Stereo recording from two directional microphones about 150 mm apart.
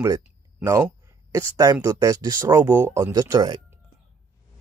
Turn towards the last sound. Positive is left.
turn(degrees=-25)  # may be behind; listen again after turning